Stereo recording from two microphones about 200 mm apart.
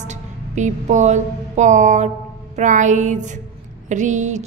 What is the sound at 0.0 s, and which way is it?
Music, 35° right (ahead or behind).